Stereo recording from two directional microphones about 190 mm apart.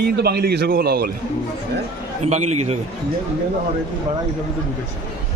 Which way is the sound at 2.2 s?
35° right (ahead or behind).